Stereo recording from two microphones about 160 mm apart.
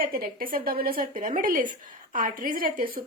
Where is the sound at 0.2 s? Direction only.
65° right (ahead or behind).